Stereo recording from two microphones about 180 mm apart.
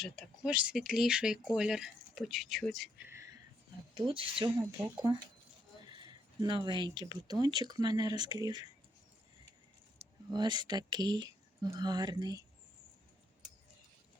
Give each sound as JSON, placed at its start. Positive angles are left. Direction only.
{"t": 0.0, "sound": "speech", "side_deg": 0}
{"t": 3.1, "sound": "a sound", "side_deg": -15}
{"t": 3.9, "sound": "speech", "side_deg": -30}
{"t": 5.8, "sound": "speech", "side_deg": -25}
{"t": 10.3, "sound": "speech", "side_deg": -25}